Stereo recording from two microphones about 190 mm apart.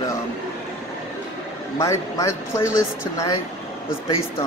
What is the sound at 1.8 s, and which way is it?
Speech, 15° left (ahead or behind).